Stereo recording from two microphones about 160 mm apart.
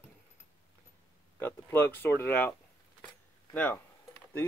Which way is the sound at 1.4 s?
15° left (ahead or behind).